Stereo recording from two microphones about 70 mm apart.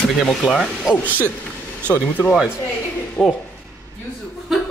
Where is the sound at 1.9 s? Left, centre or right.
Left.